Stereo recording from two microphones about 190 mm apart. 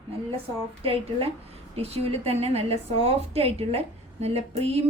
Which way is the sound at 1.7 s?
30° right (ahead or behind).